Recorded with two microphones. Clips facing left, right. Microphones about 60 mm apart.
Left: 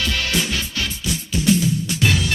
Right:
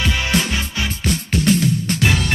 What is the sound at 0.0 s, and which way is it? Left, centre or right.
Music, right.